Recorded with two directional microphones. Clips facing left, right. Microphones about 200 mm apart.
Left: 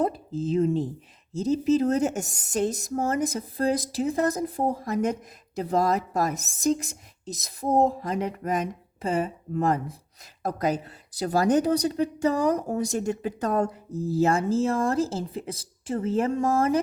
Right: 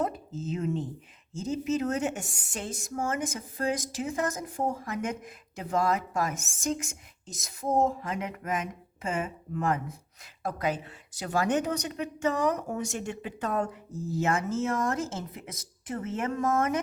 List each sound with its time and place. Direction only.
0.0 s speech: 35° left (ahead or behind)